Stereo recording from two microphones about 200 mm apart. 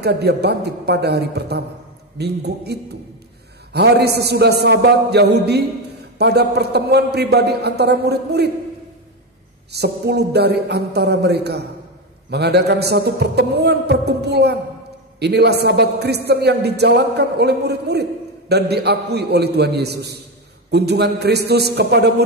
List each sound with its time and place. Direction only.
0.0 s a man's voice: 55° right (ahead or behind)
9.7 s a man's voice: 55° right (ahead or behind)